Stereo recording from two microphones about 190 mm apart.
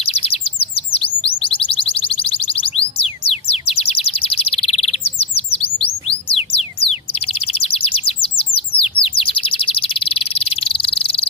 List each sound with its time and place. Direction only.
0.0 s chirp: 30° left (ahead or behind)
1.6 s music: 30° left (ahead or behind)
5.6 s chirp: 30° left (ahead or behind)